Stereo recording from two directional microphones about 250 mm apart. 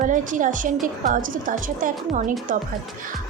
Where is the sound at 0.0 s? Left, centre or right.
Right.